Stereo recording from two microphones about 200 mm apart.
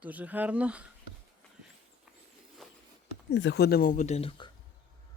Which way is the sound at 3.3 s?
60° left (ahead or behind).